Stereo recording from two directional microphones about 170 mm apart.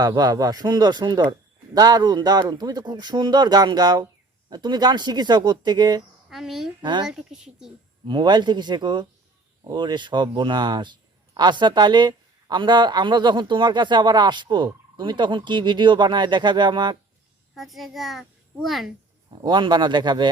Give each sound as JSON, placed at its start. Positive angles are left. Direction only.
{"t": 0.0, "sound": "a woman's voice", "side_deg": -25}
{"t": 6.3, "sound": "speech", "side_deg": 0}
{"t": 6.8, "sound": "a woman's voice", "side_deg": -25}
{"t": 7.1, "sound": "speech", "side_deg": -5}
{"t": 8.0, "sound": "a woman's voice", "side_deg": -25}
{"t": 17.5, "sound": "a child's voice", "side_deg": 0}
{"t": 19.4, "sound": "a woman's voice", "side_deg": -25}